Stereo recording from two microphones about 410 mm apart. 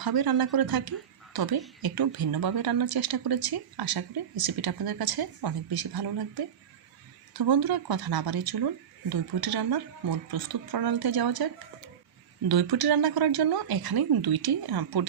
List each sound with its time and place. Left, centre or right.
0.0 s speech: right
12.5 s speech: right